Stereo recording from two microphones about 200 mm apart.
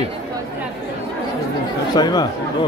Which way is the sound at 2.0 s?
20° left (ahead or behind).